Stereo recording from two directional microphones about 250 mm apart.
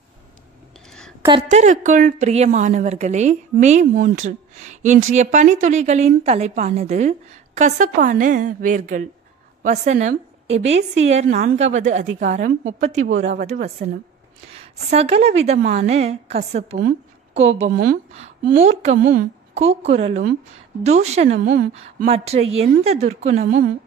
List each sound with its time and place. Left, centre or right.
0.8 s a sound: centre
1.5 s a woman's voice: right
14.5 s a woman's voice: right